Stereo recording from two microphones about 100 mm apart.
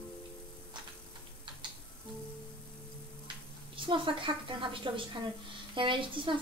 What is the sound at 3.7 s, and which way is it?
Speech, 60° right (ahead or behind).